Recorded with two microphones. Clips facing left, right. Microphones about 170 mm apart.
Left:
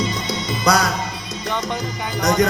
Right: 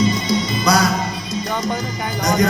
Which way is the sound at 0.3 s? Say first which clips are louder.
Right 2 dB; 60° left (ahead or behind).